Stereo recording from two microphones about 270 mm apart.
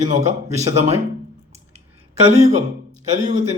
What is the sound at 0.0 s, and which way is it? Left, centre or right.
Speech, right.